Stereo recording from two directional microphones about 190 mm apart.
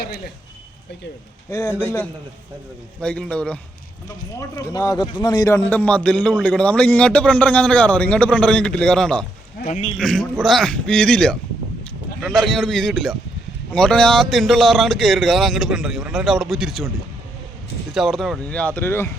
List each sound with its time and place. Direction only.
1.5 s a man's voice: 15° left (ahead or behind)
4.4 s a man's voice: 15° left (ahead or behind)
9.6 s a man's voice: 40° left (ahead or behind)
10.0 s speech: 5° left (ahead or behind)
17.9 s a man's voice: centre (ahead or behind)